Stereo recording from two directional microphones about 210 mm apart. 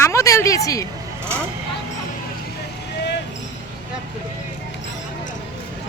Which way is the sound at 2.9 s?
55° left (ahead or behind).